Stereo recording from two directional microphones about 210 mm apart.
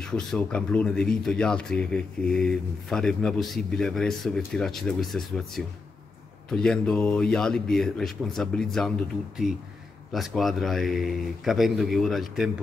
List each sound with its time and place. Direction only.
0.0 s speech: 5° left (ahead or behind)
10.1 s speech: centre (ahead or behind)